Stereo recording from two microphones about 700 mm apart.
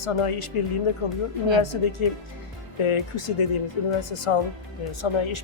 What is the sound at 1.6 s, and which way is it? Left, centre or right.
Speech, left.